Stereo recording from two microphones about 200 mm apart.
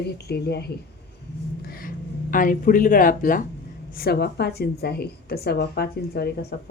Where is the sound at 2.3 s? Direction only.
45° left (ahead or behind).